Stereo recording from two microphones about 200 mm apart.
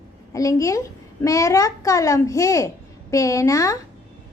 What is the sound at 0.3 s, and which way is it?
A woman's voice, 15° left (ahead or behind).